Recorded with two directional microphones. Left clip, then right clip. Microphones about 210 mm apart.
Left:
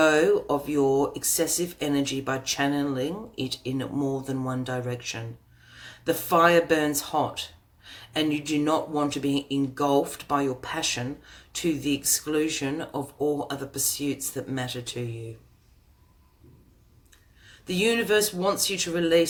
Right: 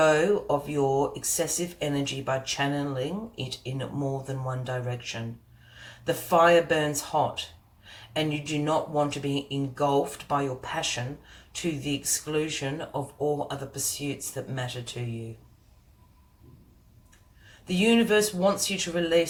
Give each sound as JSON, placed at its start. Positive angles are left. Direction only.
{"t": 0.0, "sound": "speech", "side_deg": 45}
{"t": 17.7, "sound": "speech", "side_deg": 45}